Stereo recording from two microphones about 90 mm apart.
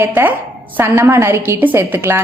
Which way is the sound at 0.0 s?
20° right (ahead or behind).